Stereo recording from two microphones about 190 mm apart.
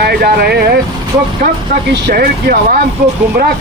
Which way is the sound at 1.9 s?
50° right (ahead or behind).